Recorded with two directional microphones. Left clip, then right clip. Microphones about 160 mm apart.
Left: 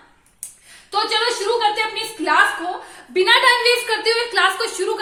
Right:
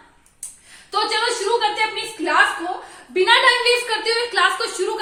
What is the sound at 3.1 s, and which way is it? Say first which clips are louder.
A woman's voice: left 1 dB; 40° left (ahead or behind).